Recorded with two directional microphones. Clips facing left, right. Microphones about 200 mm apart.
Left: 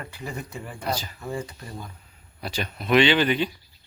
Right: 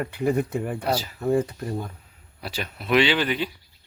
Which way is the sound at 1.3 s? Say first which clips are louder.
Right 9 dB; 55° right (ahead or behind).